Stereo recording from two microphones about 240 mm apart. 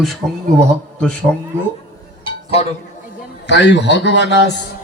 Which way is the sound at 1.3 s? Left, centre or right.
Centre.